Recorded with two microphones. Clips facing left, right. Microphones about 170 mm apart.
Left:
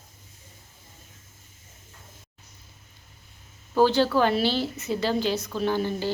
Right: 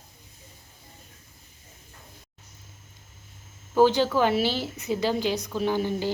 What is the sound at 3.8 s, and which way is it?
A woman's voice, 15° right (ahead or behind).